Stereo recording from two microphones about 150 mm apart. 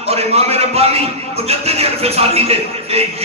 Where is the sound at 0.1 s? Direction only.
45° right (ahead or behind).